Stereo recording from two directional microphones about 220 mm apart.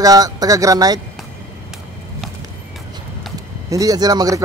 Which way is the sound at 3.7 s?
15° right (ahead or behind).